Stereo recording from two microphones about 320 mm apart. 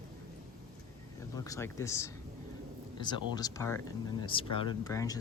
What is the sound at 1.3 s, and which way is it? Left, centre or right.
Speech, centre.